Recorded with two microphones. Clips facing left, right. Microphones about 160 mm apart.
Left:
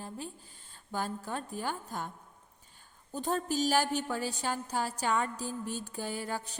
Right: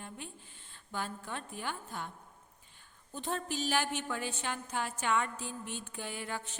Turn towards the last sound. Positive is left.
turn(degrees=40)  # may be behind; listen again after turning